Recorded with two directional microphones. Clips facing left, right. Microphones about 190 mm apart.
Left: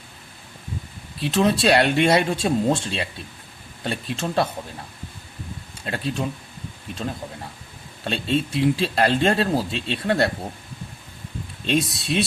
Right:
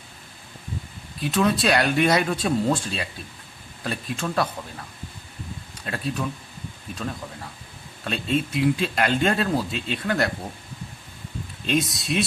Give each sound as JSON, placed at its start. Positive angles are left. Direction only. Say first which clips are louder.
{"t": 1.2, "sound": "speech", "louder": "left 2 dB", "side_deg": 25}
{"t": 5.8, "sound": "speech", "louder": "left 2 dB", "side_deg": 25}
{"t": 11.6, "sound": "speech", "louder": "left 1 dB", "side_deg": 30}